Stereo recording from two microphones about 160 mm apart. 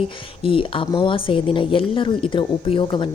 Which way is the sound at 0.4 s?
35° left (ahead or behind).